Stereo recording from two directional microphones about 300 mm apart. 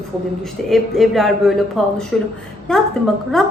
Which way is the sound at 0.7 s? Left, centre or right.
Centre.